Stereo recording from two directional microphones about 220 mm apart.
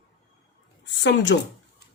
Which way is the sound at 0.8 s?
55° left (ahead or behind).